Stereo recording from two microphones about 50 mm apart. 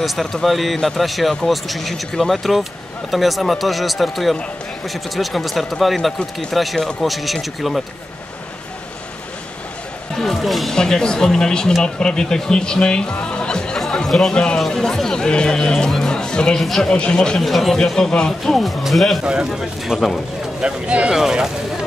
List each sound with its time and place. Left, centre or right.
0.0 s a man's voice: centre
10.1 s a man's voice: centre
10.8 s speech: centre
13.3 s music: centre
13.7 s chatter: centre
14.3 s speech: centre
16.6 s a man's voice: centre
16.9 s speech: left
17.4 s a man's voice: centre
19.9 s speech: centre
20.6 s speech: right